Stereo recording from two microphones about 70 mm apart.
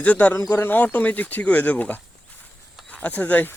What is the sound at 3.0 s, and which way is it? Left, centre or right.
Speech, left.